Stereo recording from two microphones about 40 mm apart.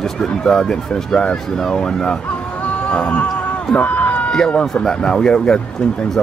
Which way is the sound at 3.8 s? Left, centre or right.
Left.